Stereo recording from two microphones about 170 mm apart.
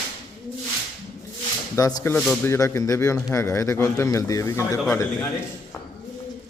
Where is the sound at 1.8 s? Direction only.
20° left (ahead or behind).